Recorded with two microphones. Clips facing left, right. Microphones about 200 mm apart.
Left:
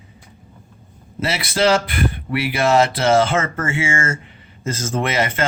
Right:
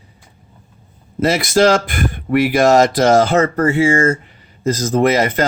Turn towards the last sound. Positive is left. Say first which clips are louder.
# right 7 dB
turn(degrees=-40)  # may be behind; listen again after turning